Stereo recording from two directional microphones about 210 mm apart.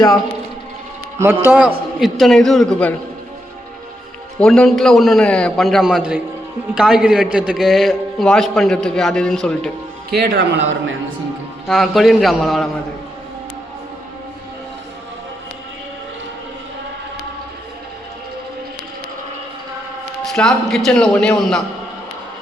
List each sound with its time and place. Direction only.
1.2 s a man's voice: 10° right (ahead or behind); by 2.9 s 5° left (ahead or behind)
4.4 s a man's voice: 5° left (ahead or behind)
10.1 s a man's voice: 50° right (ahead or behind)
11.7 s a man's voice: centre (ahead or behind)
20.2 s a man's voice: centre (ahead or behind)